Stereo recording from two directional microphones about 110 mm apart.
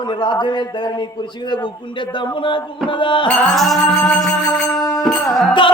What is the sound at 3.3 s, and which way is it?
Music, 5° left (ahead or behind).